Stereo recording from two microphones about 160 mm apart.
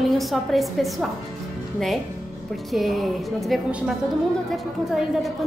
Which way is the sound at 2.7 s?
Centre (ahead or behind).